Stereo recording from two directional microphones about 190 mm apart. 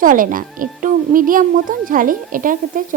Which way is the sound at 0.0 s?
45° right (ahead or behind).